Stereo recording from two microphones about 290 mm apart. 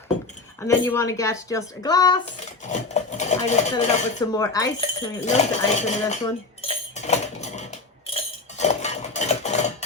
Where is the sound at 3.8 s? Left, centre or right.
Centre.